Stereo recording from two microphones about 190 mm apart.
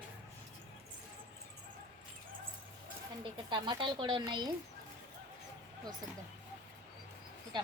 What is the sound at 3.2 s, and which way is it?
Speech, 25° right (ahead or behind).